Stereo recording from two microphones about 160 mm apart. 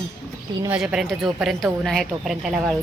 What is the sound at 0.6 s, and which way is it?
A woman's voice, 5° right (ahead or behind).